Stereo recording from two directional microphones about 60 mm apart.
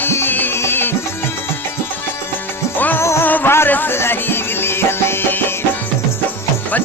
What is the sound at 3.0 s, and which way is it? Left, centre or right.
Music, left.